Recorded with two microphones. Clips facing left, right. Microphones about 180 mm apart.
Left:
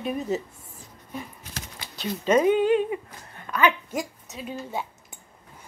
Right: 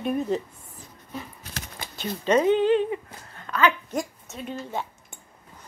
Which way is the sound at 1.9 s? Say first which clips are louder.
Even; 10° left (ahead or behind).